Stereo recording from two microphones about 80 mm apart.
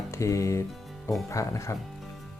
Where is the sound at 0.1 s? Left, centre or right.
Left.